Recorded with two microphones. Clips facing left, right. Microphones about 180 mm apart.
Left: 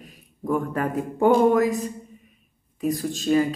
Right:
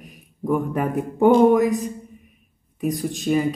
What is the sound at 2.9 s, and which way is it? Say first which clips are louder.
Speech: left 1 dB; 15° right (ahead or behind).